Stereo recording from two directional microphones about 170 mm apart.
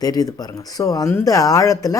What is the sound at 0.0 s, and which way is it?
Speech, 20° left (ahead or behind).